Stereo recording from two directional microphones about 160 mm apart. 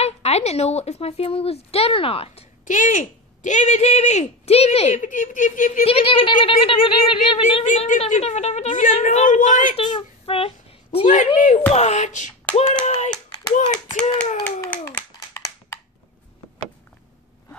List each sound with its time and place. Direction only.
0.0 s a woman's voice: 40° left (ahead or behind)
2.6 s speech: 55° left (ahead or behind)
5.9 s a woman's voice: 35° left (ahead or behind)
7.6 s speech: 50° left (ahead or behind)
9.8 s a child's voice: 35° left (ahead or behind)
11.1 s speech: 50° left (ahead or behind)
14.4 s a sound: 15° left (ahead or behind)